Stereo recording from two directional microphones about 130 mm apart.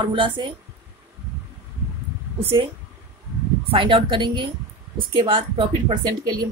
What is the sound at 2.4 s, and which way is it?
Speech, 45° right (ahead or behind).